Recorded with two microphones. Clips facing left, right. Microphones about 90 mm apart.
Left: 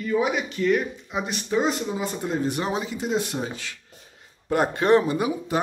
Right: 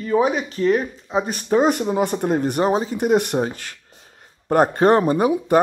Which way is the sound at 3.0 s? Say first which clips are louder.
Right 8 dB; 60° right (ahead or behind).